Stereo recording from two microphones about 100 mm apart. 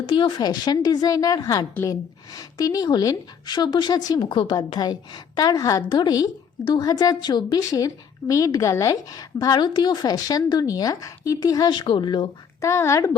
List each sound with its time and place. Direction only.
0.0 s a woman's voice: 55° left (ahead or behind)
4.5 s a woman's voice: 40° left (ahead or behind)
11.7 s a woman's voice: 50° left (ahead or behind)
12.6 s speech: 30° left (ahead or behind)